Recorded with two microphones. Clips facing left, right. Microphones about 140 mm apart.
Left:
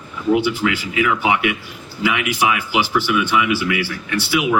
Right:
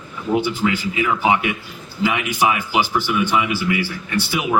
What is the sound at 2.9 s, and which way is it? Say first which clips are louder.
Speech: left 1 dB; 45° right (ahead or behind).